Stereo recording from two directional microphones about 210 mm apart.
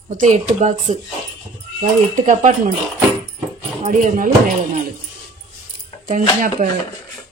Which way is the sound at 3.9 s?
40° right (ahead or behind).